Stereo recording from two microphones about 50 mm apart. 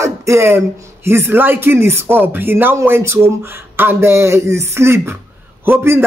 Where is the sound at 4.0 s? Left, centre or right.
Right.